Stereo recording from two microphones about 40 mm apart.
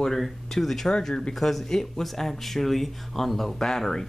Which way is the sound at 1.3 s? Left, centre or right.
Centre.